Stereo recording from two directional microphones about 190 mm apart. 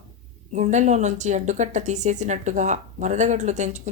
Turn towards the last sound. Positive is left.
turn(degrees=-40)  # may be behind; listen again after turning